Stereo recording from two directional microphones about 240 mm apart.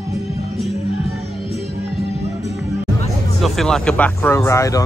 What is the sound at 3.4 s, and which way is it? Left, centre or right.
Speech, centre.